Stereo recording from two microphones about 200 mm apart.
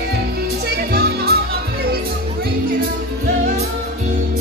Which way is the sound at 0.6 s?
50° right (ahead or behind).